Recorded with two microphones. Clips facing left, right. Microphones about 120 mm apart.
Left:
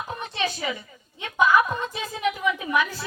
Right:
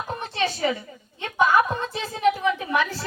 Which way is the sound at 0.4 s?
35° right (ahead or behind).